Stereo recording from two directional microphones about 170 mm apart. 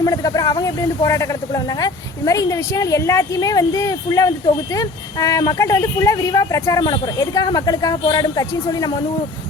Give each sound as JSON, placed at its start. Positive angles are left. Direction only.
{"t": 0.0, "sound": "speech", "side_deg": 20}